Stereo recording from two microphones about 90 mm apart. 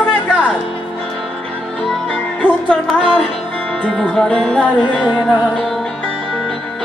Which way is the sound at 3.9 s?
5° left (ahead or behind).